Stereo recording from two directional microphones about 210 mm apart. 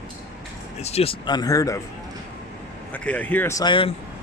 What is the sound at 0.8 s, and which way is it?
Speech, 30° left (ahead or behind).